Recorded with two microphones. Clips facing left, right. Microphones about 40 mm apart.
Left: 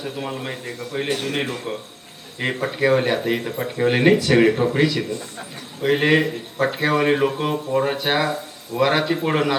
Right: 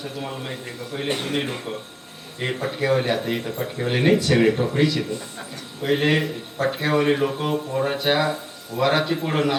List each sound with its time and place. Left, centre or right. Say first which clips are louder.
0.0 s speech: left 3 dB; centre
1.0 s a man's voice: even; right
2.4 s speech: left 4 dB; centre